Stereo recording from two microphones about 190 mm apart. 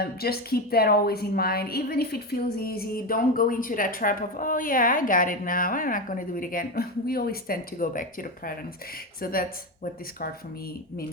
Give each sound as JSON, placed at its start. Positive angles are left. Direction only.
{"t": 0.0, "sound": "a woman's voice", "side_deg": 55}